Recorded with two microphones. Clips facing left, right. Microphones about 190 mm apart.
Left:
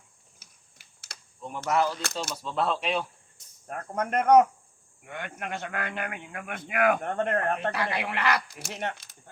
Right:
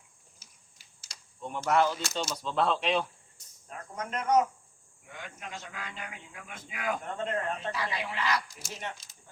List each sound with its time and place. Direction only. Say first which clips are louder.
0.3 s typing: left 2 dB; 60° left (ahead or behind)
1.4 s speech: even; centre (ahead or behind)
3.7 s a man's voice: left 8 dB; 60° left (ahead or behind)